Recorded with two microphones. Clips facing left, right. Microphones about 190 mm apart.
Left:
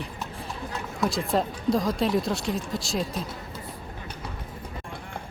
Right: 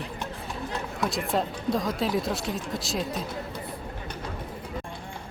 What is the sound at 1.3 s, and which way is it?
Speech, centre (ahead or behind).